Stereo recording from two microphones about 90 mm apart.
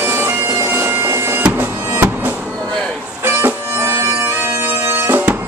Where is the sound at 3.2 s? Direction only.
25° right (ahead or behind).